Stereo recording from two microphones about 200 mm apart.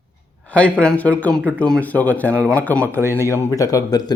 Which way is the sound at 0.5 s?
5° left (ahead or behind).